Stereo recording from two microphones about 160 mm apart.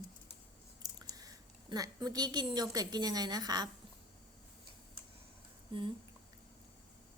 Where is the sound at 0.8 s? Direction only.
25° right (ahead or behind).